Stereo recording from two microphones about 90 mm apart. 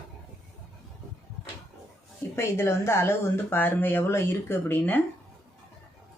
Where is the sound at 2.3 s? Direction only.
30° left (ahead or behind).